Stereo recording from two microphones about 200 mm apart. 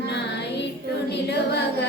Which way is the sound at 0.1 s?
60° left (ahead or behind).